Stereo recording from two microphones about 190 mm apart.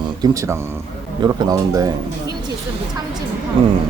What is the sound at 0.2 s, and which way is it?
Speech, 15° right (ahead or behind).